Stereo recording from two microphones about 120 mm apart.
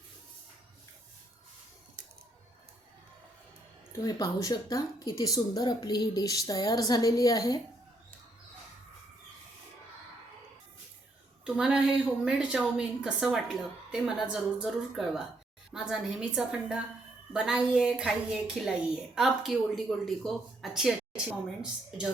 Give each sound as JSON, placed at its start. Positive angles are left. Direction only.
{"t": 3.9, "sound": "speech", "side_deg": 30}
{"t": 11.4, "sound": "speech", "side_deg": -5}
{"t": 14.6, "sound": "a woman's voice", "side_deg": -5}